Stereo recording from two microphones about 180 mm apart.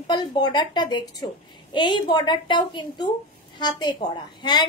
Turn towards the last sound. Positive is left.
turn(degrees=25)  # may be behind; listen again after turning